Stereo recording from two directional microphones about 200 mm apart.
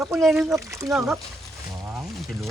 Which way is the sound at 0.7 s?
15° right (ahead or behind).